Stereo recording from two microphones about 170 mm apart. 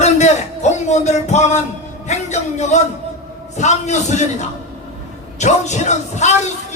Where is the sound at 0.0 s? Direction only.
45° left (ahead or behind).